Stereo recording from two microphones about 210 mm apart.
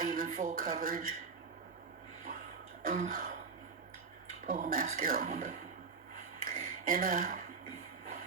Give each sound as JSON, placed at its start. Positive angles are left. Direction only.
{"t": 0.1, "sound": "speech", "side_deg": -40}
{"t": 2.8, "sound": "throat clearing", "side_deg": -40}
{"t": 4.4, "sound": "speech", "side_deg": -40}
{"t": 6.4, "sound": "a sound", "side_deg": -40}